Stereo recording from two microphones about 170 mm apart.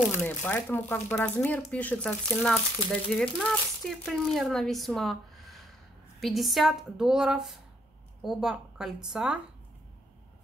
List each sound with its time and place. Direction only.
0.2 s speech: 10° left (ahead or behind); by 9.4 s 5° right (ahead or behind)